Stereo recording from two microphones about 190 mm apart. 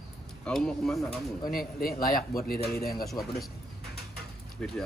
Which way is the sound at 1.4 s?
50° left (ahead or behind).